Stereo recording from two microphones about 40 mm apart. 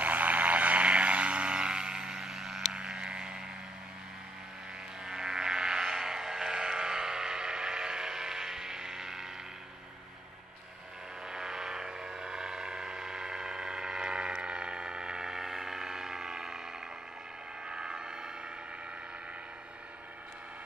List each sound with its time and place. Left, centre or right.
0.0 s vehicle: right; by 3.4 s centre
5.0 s music: centre
5.9 s a sound: centre
11.2 s vehicle: centre
17.6 s vehicle: right